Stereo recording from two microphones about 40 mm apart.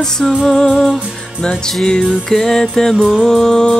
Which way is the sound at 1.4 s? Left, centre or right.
Centre.